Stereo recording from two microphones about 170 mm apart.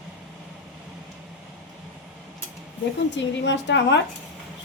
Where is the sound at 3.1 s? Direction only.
90° left.